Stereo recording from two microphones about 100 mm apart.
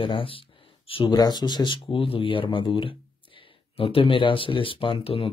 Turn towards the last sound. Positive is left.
turn(degrees=65)  # may be behind; listen again after turning